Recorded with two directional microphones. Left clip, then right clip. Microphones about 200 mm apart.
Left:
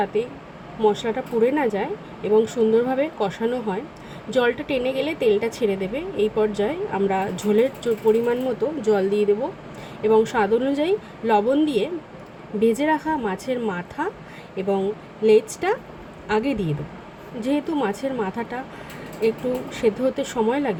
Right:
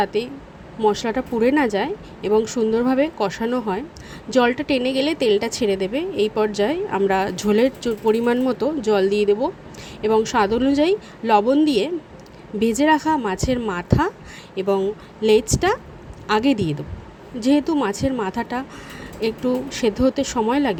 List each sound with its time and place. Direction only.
0.0 s a woman's voice: 45° right (ahead or behind)
20.0 s a woman's voice: 35° right (ahead or behind)